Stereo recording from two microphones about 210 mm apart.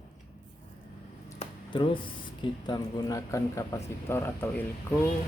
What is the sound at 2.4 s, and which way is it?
Speech, 20° left (ahead or behind).